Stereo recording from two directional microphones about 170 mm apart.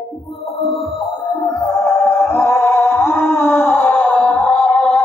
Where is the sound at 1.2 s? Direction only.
25° left (ahead or behind).